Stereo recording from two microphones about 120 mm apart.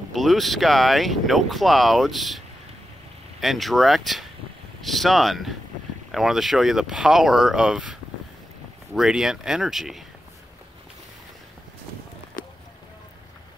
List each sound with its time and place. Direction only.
0.1 s speech: centre (ahead or behind)